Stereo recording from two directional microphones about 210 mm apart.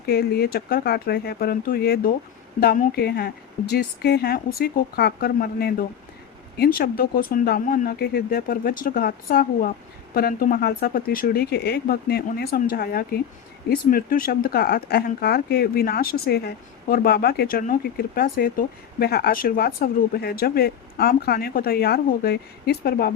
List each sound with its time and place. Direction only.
0.0 s speech: 50° left (ahead or behind)